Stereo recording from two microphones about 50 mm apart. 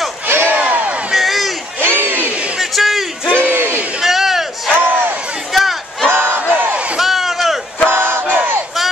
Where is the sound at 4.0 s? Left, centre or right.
Centre.